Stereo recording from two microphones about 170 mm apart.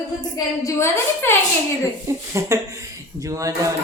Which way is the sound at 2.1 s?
15° right (ahead or behind).